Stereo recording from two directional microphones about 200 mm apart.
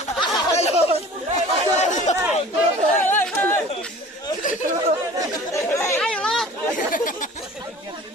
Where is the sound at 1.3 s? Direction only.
35° left (ahead or behind).